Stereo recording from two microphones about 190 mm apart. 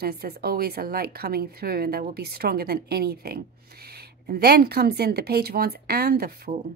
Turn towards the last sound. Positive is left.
turn(degrees=-50)  # may be behind; listen again after turning